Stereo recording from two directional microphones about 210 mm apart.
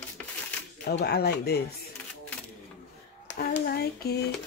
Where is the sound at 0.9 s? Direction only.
50° left (ahead or behind).